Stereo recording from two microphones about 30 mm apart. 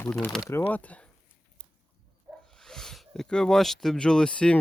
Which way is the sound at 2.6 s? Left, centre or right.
Centre.